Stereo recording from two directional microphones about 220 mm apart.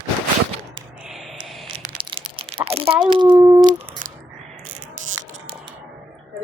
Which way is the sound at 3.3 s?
15° right (ahead or behind).